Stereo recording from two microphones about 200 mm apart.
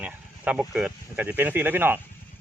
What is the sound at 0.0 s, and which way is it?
Speech, 5° right (ahead or behind).